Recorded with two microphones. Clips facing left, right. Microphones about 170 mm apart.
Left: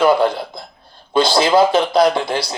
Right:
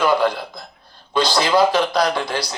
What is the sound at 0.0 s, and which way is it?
Speech, 25° left (ahead or behind).